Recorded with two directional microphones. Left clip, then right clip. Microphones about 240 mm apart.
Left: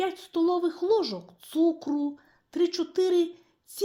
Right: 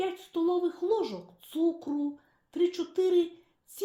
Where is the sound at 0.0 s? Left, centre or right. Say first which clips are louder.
Left 3 dB; left.